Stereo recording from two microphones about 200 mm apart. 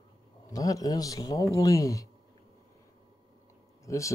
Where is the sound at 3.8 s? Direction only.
15° left (ahead or behind).